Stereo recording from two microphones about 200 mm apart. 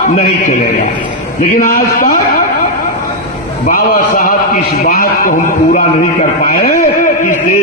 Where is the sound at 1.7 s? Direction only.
45° left (ahead or behind).